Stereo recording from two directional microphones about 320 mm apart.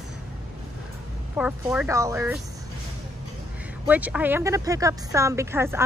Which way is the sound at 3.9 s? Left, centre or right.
Centre.